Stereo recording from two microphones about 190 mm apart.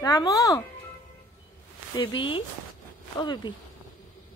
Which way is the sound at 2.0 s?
25° left (ahead or behind).